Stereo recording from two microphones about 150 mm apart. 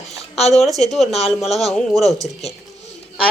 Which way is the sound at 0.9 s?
Centre (ahead or behind).